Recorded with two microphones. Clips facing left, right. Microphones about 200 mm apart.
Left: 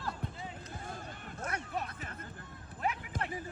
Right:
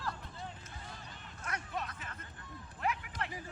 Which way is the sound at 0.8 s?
50° left (ahead or behind).